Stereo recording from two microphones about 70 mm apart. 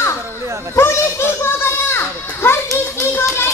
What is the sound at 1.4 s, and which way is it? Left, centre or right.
Children playing, left.